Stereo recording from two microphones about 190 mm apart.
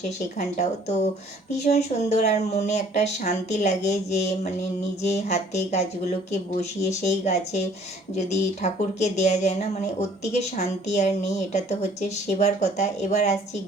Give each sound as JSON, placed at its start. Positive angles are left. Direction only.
{"t": 0.3, "sound": "speech", "side_deg": 35}